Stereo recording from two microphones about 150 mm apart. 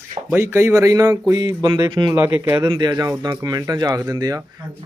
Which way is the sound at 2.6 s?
30° right (ahead or behind).